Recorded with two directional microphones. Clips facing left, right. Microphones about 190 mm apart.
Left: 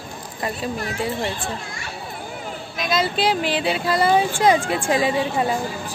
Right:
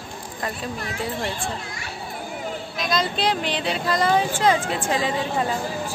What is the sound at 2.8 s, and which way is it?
Speech, 5° left (ahead or behind).